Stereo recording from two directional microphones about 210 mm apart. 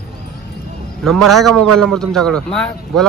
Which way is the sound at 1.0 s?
Centre (ahead or behind).